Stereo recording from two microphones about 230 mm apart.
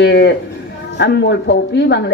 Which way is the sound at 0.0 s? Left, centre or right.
Left.